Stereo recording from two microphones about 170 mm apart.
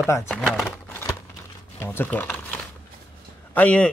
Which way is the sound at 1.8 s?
10° left (ahead or behind).